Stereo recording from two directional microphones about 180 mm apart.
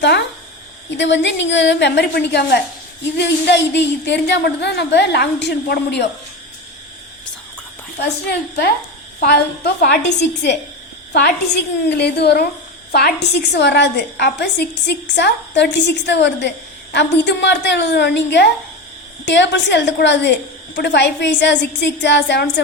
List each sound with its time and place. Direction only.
0.0 s speech: 70° left (ahead or behind)
0.9 s a woman's voice: 85° left; by 6.1 s 65° left (ahead or behind)
9.2 s a woman's voice: 60° left (ahead or behind)
19.2 s a woman's voice: 80° left